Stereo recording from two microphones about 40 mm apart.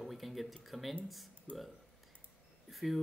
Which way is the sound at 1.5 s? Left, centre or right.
Left.